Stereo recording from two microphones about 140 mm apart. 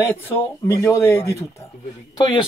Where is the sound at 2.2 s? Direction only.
35° left (ahead or behind).